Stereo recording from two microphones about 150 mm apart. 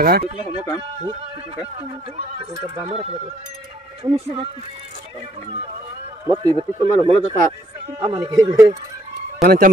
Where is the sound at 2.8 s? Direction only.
40° right (ahead or behind).